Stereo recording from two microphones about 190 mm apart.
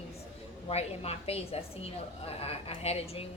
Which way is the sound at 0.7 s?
35° left (ahead or behind).